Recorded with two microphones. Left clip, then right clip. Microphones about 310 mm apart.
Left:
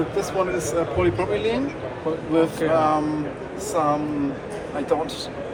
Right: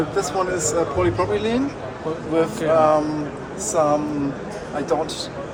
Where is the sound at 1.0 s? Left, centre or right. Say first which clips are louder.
Right 1 dB; right.